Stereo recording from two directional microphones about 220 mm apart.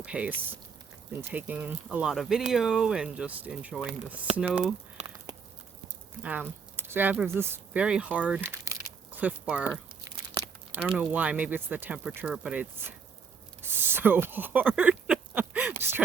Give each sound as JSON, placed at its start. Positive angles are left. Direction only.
{"t": 0.0, "sound": "speech", "side_deg": -5}
{"t": 4.9, "sound": "a sound", "side_deg": -20}
{"t": 6.2, "sound": "speech", "side_deg": -10}
{"t": 10.9, "sound": "speech", "side_deg": -5}
{"t": 13.6, "sound": "a sound", "side_deg": -10}
{"t": 15.8, "sound": "speech", "side_deg": -10}